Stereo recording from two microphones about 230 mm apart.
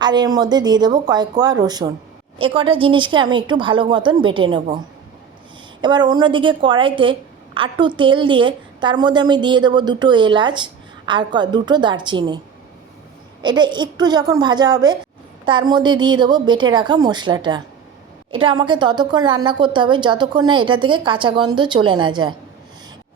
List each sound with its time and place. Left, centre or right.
0.0 s a woman's voice: centre
5.8 s a woman's voice: centre
13.4 s a woman's voice: centre